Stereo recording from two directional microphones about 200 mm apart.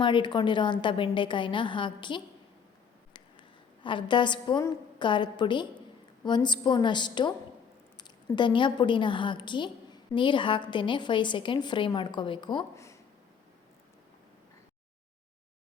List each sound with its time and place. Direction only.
0.0 s a woman's voice: 25° left (ahead or behind)
3.8 s a woman's voice: 25° left (ahead or behind)